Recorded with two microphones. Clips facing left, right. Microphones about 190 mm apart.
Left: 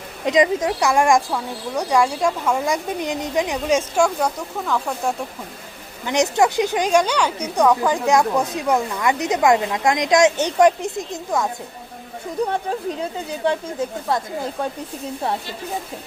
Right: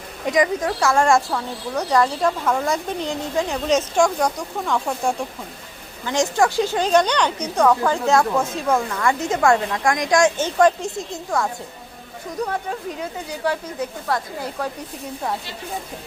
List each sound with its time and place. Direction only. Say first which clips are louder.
0.3 s speech: left 2 dB; 20° left (ahead or behind); by 5.1 s centre (ahead or behind)
6.1 s speech: left 1 dB; 20° left (ahead or behind)
13.0 s speech: left 3 dB; 25° left (ahead or behind)